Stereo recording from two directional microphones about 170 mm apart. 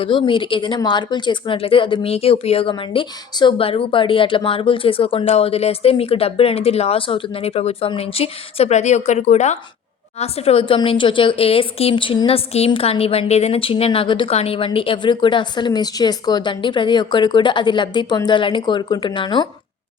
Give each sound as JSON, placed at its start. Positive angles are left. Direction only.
{"t": 0.0, "sound": "a woman's voice", "side_deg": 30}